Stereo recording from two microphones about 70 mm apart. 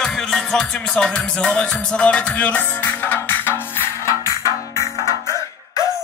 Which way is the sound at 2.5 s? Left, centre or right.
Left.